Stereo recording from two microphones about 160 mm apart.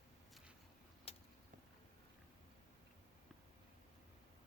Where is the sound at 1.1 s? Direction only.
40° left (ahead or behind).